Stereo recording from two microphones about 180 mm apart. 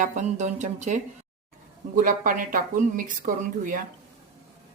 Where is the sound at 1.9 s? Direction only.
50° right (ahead or behind).